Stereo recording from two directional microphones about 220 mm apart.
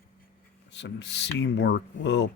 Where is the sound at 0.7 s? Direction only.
55° left (ahead or behind).